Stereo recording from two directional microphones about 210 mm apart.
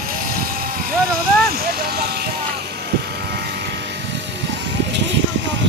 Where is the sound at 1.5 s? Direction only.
50° right (ahead or behind).